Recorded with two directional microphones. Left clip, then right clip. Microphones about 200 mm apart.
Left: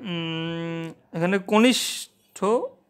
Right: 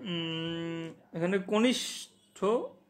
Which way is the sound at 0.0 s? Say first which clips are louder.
Left 5 dB; 30° left (ahead or behind).